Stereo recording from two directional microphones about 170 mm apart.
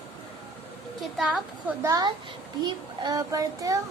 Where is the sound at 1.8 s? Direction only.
20° right (ahead or behind).